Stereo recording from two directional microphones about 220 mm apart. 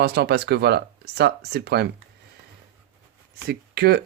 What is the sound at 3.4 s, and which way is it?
Speech, 45° right (ahead or behind).